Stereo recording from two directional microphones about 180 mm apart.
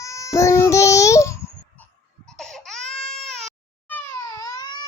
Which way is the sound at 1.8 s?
5° left (ahead or behind).